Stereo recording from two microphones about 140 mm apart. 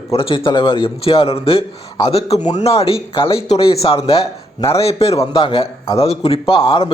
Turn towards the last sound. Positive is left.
turn(degrees=40)  # may be behind; listen again after turning